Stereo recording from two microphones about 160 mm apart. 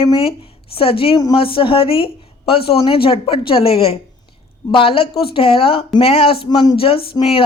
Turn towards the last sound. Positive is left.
turn(degrees=35)  # may be behind; listen again after turning